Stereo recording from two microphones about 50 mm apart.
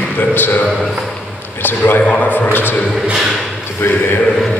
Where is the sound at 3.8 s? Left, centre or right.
Left.